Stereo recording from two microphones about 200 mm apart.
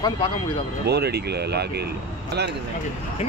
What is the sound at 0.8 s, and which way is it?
Speech, 55° right (ahead or behind).